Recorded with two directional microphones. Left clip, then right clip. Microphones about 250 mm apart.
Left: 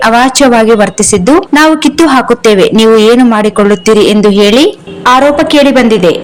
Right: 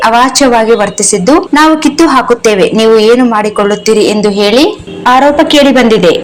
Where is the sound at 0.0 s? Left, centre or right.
Left.